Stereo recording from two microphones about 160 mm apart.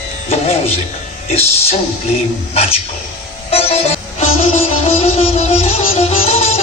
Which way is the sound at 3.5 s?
40° left (ahead or behind).